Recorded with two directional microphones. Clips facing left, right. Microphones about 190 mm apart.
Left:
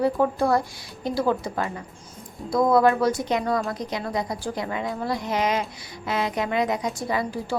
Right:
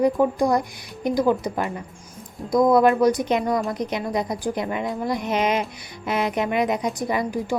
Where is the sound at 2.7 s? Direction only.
20° right (ahead or behind).